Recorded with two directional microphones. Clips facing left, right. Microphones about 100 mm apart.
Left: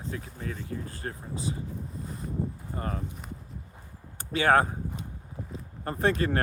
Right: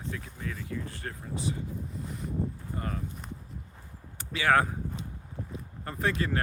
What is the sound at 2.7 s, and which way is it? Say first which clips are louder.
Speech: left 3 dB; 35° left (ahead or behind).